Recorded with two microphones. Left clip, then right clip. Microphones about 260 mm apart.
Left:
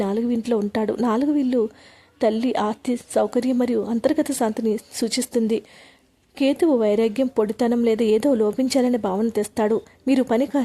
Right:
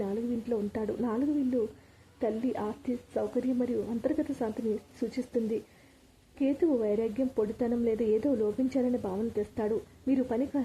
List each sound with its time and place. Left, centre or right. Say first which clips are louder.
0.0 s a woman's voice: left 10 dB; left